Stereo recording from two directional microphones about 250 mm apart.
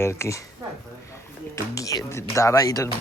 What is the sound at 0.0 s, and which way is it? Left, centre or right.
Speech, centre.